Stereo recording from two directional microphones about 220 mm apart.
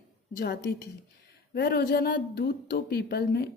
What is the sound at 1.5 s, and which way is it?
Speech, 45° left (ahead or behind).